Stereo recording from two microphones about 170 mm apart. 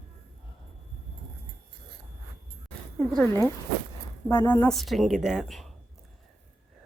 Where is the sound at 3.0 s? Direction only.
5° left (ahead or behind).